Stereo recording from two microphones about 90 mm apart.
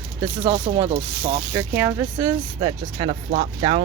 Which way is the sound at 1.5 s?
25° right (ahead or behind).